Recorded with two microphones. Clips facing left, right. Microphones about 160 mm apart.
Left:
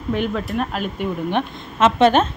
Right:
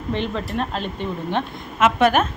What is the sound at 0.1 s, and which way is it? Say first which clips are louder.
A woman's voice: left 3 dB; 5° left (ahead or behind).